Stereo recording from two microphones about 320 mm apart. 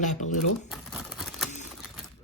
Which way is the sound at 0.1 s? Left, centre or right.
Left.